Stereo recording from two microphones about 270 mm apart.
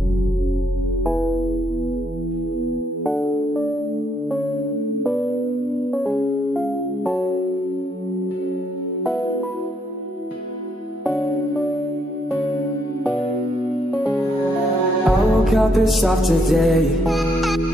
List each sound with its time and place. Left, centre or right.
1.0 s music: centre
3.1 s music: centre
5.9 s music: centre
15.0 s music: centre